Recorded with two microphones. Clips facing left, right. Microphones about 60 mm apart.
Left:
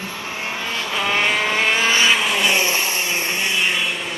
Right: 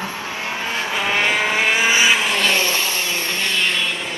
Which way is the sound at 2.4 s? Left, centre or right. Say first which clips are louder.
Even; centre.